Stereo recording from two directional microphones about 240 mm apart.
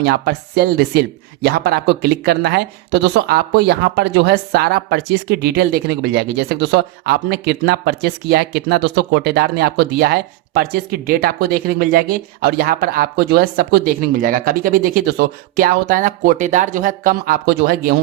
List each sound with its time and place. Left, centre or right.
0.0 s speech: right